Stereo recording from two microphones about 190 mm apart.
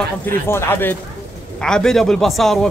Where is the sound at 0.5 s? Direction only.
10° left (ahead or behind).